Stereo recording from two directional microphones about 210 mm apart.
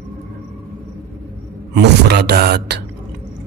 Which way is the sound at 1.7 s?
55° right (ahead or behind).